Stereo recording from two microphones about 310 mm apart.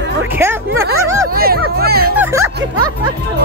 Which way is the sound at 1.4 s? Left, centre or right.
Right.